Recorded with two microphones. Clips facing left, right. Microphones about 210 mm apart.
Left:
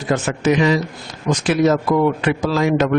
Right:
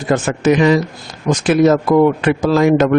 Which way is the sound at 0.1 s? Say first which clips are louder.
Right 3 dB; 50° right (ahead or behind).